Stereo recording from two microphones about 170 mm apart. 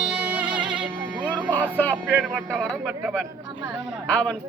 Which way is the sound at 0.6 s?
25° right (ahead or behind).